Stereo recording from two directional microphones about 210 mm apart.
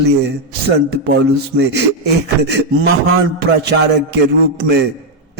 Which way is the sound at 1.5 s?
55° right (ahead or behind).